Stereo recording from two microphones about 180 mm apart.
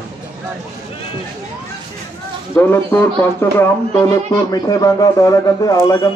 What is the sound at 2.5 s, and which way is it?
Speech, 10° left (ahead or behind).